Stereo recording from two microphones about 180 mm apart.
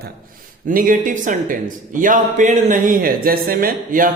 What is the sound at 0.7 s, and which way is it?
Speech, 50° right (ahead or behind).